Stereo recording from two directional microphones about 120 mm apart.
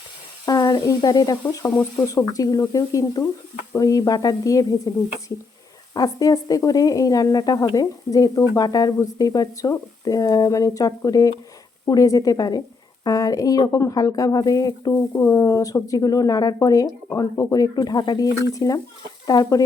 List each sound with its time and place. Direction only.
0.4 s a woman's voice: 30° left (ahead or behind)